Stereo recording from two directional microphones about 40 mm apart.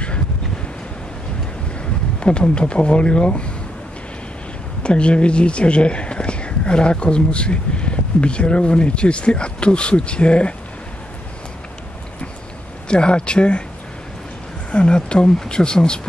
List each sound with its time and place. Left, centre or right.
2.1 s speech: left
4.8 s speech: left
12.8 s speech: left
14.7 s speech: left